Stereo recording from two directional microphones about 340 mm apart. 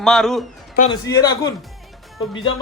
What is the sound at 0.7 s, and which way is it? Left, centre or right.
Speech, left.